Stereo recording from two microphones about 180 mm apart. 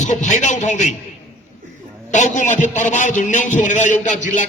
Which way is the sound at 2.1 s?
45° left (ahead or behind).